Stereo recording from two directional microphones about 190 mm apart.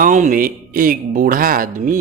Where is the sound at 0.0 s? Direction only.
45° right (ahead or behind).